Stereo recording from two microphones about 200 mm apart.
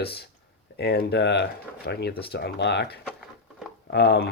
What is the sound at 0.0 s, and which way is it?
Speech, 55° left (ahead or behind).